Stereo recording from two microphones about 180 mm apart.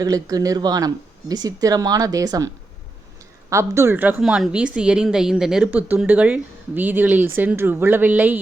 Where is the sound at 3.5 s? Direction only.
15° right (ahead or behind).